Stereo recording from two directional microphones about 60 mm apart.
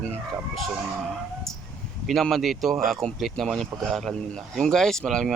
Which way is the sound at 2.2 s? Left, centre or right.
Centre.